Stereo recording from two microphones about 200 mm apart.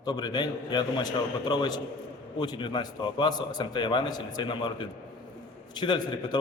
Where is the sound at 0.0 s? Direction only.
20° left (ahead or behind).